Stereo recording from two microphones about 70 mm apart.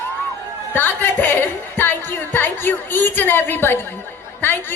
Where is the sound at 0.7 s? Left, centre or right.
Left.